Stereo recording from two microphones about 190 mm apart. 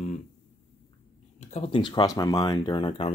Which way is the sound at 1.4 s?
35° left (ahead or behind).